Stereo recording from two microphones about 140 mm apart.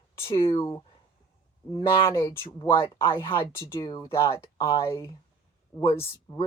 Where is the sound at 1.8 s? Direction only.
20° left (ahead or behind).